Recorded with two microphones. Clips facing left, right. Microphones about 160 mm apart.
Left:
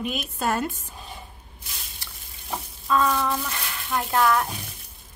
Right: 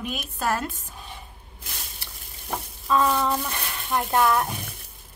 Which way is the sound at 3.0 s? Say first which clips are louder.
Right 1 dB; 20° right (ahead or behind).